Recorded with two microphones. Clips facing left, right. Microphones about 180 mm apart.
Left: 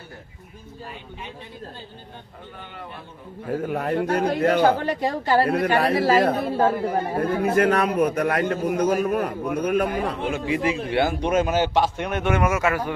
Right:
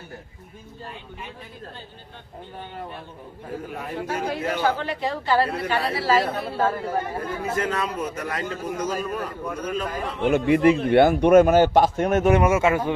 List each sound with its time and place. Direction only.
3.6 s a man's voice: 60° left (ahead or behind)
6.6 s a man's voice: 15° left (ahead or behind)
7.2 s a man's voice: 60° left (ahead or behind)
10.2 s a man's voice: 60° right (ahead or behind); by 12.9 s 25° right (ahead or behind)